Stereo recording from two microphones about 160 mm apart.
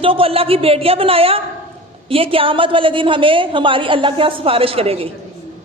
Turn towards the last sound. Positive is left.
turn(degrees=-35)  # may be behind; listen again after turning